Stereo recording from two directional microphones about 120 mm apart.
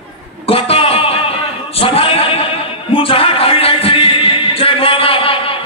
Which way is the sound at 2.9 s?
50° left (ahead or behind).